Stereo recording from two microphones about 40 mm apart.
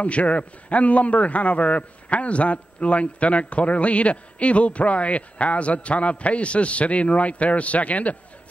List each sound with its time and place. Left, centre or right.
0.0 s a man's voice: left